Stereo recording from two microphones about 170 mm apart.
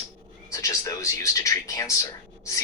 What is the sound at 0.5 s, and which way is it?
Speech, 20° left (ahead or behind).